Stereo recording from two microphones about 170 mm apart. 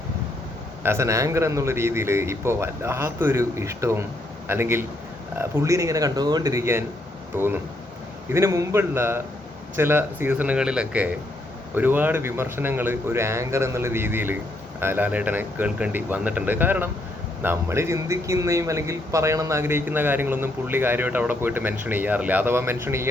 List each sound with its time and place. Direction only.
0.8 s speech: 15° right (ahead or behind)